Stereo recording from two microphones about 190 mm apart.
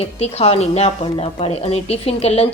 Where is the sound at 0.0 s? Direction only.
35° left (ahead or behind).